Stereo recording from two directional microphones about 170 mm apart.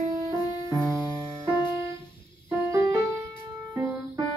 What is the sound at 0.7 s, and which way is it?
Music, 15° right (ahead or behind).